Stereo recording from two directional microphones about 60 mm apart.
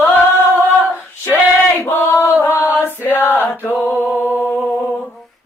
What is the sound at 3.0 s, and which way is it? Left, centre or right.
Chant, left.